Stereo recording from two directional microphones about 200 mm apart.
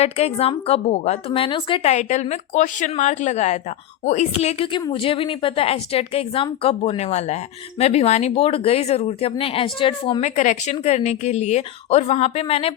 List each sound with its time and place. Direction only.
0.0 s a woman's voice: 30° left (ahead or behind)